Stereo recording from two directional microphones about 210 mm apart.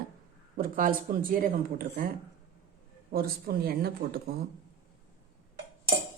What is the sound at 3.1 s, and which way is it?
Speech, 45° right (ahead or behind).